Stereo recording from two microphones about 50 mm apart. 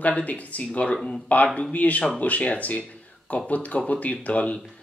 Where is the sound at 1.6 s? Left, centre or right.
Left.